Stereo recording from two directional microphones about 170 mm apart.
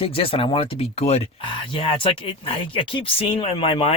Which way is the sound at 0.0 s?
35° left (ahead or behind).